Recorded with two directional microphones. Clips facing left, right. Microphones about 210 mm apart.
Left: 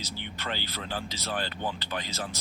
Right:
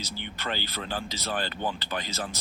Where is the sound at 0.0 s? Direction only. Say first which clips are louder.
Right 2 dB; 45° right (ahead or behind).